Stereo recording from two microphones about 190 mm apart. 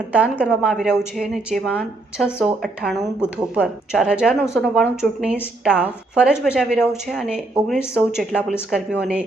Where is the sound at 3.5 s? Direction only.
5° right (ahead or behind).